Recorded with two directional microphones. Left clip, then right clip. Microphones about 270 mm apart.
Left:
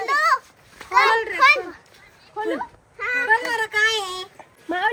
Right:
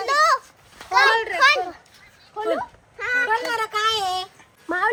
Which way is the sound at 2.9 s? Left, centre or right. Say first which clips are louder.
Left 1 dB; right.